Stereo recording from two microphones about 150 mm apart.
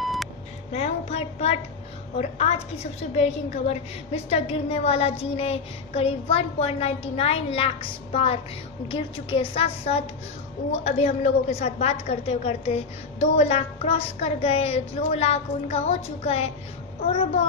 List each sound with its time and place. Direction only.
0.0 s beep: centre (ahead or behind)
0.7 s a child's voice: 45° left (ahead or behind)